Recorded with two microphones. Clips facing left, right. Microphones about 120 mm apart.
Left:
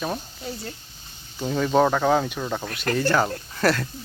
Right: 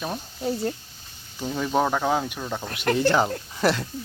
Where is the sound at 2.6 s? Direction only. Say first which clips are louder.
Right 4 dB; 15° right (ahead or behind).